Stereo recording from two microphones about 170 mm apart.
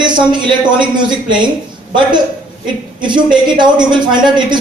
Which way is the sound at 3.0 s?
30° right (ahead or behind).